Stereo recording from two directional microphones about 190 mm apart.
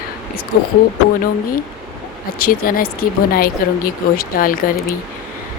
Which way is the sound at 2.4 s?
50° left (ahead or behind).